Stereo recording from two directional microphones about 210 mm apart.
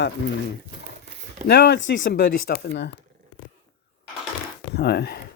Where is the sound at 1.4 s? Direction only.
50° left (ahead or behind).